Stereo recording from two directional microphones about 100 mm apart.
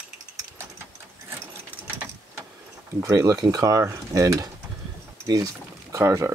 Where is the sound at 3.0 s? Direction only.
35° right (ahead or behind).